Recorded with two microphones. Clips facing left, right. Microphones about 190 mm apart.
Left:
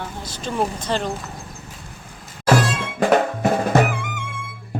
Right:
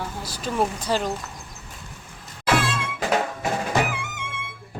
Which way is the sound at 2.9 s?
50° left (ahead or behind).